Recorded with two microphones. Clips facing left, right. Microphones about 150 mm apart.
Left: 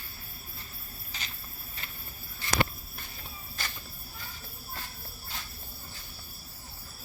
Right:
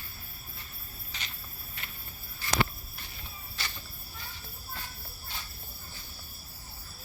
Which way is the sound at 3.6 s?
45° left (ahead or behind).